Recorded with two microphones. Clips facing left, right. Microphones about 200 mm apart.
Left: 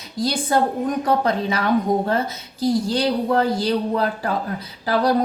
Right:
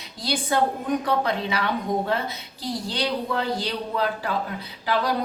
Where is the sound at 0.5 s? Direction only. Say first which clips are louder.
Left 2 dB; 40° left (ahead or behind).